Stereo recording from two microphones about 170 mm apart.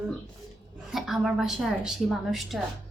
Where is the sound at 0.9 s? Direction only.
Centre (ahead or behind).